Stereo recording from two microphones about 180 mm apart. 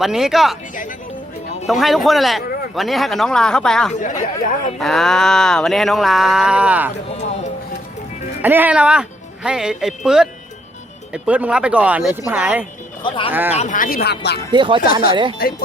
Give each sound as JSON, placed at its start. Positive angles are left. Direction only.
{"t": 0.0, "sound": "a man's voice", "side_deg": 0}
{"t": 1.6, "sound": "a man's voice", "side_deg": 0}
{"t": 3.9, "sound": "speech", "side_deg": 40}
{"t": 4.8, "sound": "a man's voice", "side_deg": 0}
{"t": 8.4, "sound": "speech", "side_deg": -10}
{"t": 13.1, "sound": "speech", "side_deg": 30}
{"t": 13.3, "sound": "speech", "side_deg": -10}
{"t": 13.6, "sound": "speech", "side_deg": 45}
{"t": 14.5, "sound": "speech", "side_deg": -25}